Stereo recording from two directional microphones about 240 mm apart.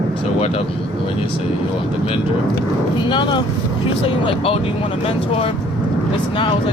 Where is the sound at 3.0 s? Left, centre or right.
Centre.